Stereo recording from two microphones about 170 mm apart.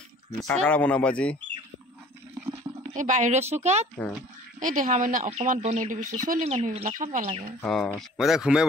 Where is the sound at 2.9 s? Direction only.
50° right (ahead or behind).